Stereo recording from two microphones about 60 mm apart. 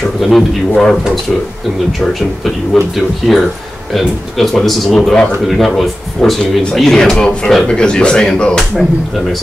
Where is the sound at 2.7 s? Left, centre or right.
Centre.